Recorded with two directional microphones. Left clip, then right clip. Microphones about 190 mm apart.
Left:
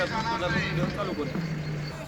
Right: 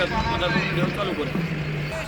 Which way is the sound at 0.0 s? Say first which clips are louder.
Right 4 dB; 40° right (ahead or behind).